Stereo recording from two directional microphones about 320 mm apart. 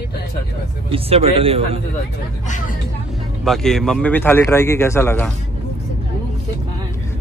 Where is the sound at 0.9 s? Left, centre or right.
Centre.